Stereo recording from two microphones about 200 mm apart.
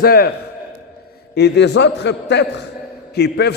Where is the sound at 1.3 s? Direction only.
55° left (ahead or behind).